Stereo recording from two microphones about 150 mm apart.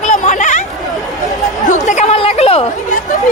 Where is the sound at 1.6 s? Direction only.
55° left (ahead or behind).